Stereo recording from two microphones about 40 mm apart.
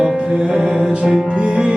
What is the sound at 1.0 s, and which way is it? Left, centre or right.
Mantra, centre.